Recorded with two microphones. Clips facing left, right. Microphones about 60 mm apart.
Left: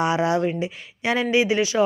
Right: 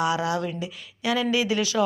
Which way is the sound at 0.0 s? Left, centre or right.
Left.